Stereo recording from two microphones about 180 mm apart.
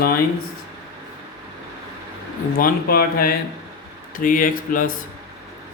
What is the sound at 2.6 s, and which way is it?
Speech, 55° left (ahead or behind).